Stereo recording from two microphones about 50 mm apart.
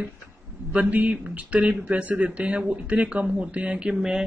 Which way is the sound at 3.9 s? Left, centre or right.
Centre.